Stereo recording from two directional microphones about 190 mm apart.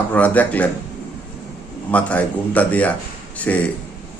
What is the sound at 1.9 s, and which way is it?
A man's voice, 5° left (ahead or behind).